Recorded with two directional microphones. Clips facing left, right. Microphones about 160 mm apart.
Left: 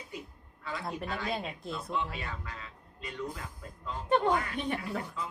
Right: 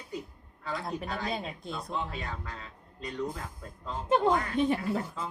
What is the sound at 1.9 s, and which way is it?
A man's voice, 35° right (ahead or behind).